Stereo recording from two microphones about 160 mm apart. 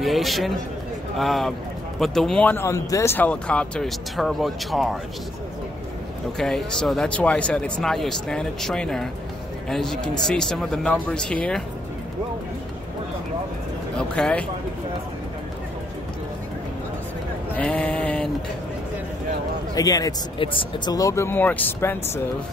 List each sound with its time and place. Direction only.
0.0 s a man's voice: centre (ahead or behind)
6.3 s speech: 5° left (ahead or behind)
13.9 s speech: 5° left (ahead or behind)
17.6 s sheep: 5° left (ahead or behind)
19.7 s speech: 20° left (ahead or behind)